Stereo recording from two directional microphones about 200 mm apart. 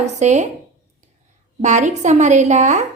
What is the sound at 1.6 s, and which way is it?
A woman's voice, 35° right (ahead or behind).